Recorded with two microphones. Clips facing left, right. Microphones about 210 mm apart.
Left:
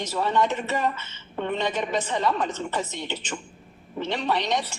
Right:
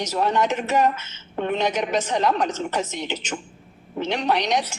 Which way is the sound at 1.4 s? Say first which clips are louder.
Right 3 dB; 75° right (ahead or behind).